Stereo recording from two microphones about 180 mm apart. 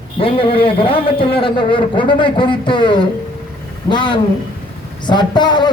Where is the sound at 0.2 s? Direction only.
30° left (ahead or behind).